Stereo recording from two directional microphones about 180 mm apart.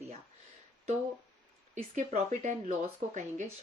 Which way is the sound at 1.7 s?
40° right (ahead or behind).